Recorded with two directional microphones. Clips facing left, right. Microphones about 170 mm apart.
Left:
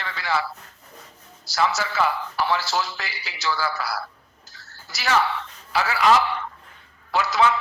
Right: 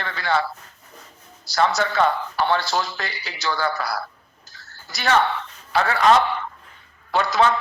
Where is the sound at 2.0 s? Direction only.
30° right (ahead or behind).